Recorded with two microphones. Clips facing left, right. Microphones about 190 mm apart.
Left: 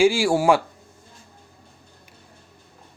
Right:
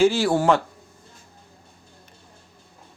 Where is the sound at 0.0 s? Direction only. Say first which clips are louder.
Left 1 dB; 10° left (ahead or behind).